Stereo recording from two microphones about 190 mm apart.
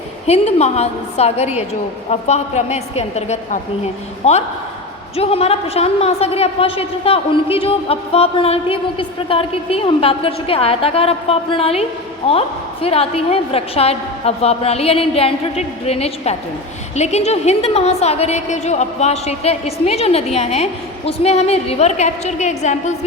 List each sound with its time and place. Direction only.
0.3 s a woman's voice: 35° left (ahead or behind)